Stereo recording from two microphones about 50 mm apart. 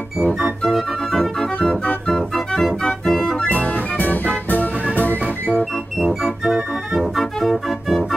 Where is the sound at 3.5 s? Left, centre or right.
Left.